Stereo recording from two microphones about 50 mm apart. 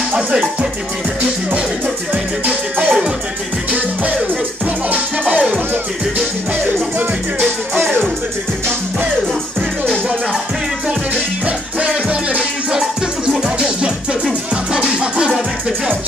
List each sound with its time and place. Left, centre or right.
0.3 s music: right
2.4 s music: right
11.4 s music: right
13.4 s music: centre